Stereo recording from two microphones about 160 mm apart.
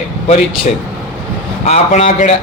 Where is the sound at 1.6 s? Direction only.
45° left (ahead or behind).